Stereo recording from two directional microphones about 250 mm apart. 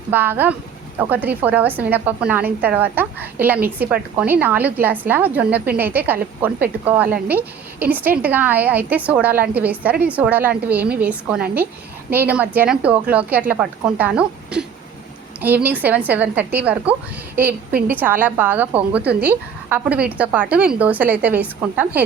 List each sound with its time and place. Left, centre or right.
0.1 s a woman's voice: centre
17.7 s a woman's voice: right
17.9 s a woman's voice: centre